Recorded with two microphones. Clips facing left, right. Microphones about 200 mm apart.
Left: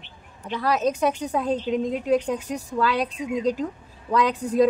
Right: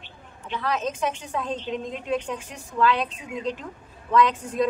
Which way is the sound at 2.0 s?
40° left (ahead or behind).